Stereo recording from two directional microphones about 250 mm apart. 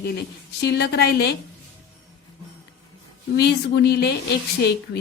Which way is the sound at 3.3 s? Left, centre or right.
Left.